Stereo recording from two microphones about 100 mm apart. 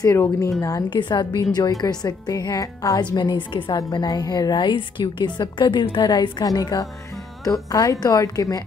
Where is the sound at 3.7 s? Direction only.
45° left (ahead or behind).